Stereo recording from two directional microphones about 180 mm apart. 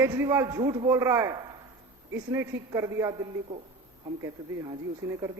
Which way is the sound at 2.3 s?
15° right (ahead or behind).